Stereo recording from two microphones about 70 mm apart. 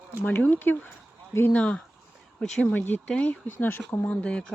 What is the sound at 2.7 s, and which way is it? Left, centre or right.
Speech, left.